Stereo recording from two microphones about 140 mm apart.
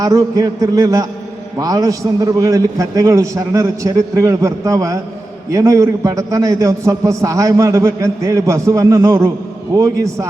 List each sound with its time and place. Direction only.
0.0 s a man's voice: 25° right (ahead or behind)